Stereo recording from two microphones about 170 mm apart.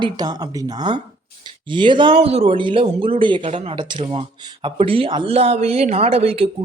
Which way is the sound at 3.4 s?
40° right (ahead or behind).